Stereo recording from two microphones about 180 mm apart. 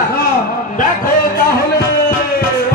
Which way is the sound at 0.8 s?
50° left (ahead or behind).